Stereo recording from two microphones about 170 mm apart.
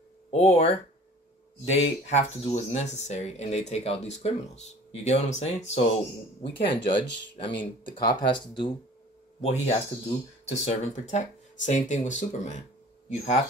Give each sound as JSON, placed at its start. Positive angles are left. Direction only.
{"t": 0.3, "sound": "speech", "side_deg": 35}
{"t": 9.4, "sound": "speech", "side_deg": 40}